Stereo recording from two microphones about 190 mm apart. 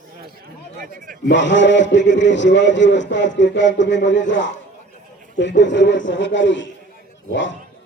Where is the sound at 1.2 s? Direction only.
70° left (ahead or behind).